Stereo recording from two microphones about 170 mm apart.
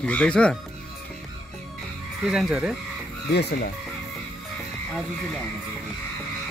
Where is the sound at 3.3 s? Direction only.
70° left (ahead or behind).